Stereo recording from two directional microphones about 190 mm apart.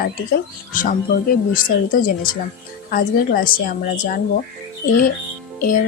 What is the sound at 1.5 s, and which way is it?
Speech, 45° left (ahead or behind).